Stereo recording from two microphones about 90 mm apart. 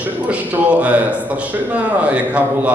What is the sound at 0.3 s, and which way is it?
A man's voice, 15° right (ahead or behind).